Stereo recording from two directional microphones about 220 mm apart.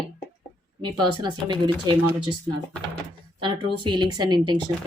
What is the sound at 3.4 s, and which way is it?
A woman's voice, 20° right (ahead or behind).